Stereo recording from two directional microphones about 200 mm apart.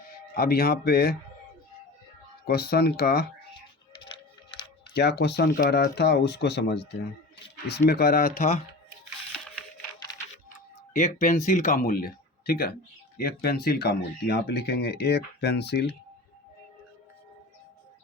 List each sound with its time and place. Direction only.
0.3 s speech: 50° left (ahead or behind)
2.5 s speech: 50° left (ahead or behind)
4.9 s speech: 55° left (ahead or behind)
11.0 s speech: 35° left (ahead or behind); by 16.0 s 55° left (ahead or behind)